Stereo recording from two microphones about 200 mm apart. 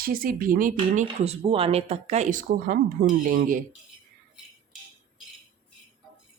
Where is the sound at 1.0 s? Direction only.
30° right (ahead or behind).